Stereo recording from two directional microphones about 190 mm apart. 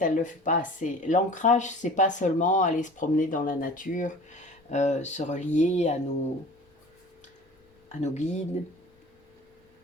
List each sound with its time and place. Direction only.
0.0 s speech: 40° left (ahead or behind)
7.9 s speech: 40° left (ahead or behind)